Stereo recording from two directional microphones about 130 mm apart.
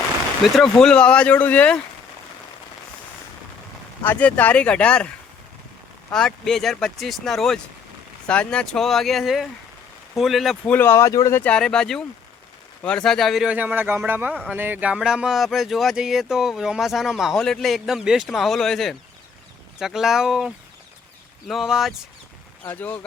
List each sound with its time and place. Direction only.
0.4 s speech: centre (ahead or behind)
4.0 s speech: 15° left (ahead or behind)
10.7 s speech: 15° left (ahead or behind)
11.5 s speech: 5° left (ahead or behind)
22.6 s speech: 15° left (ahead or behind)